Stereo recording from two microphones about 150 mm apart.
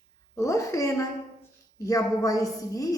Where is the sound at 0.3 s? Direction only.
20° left (ahead or behind).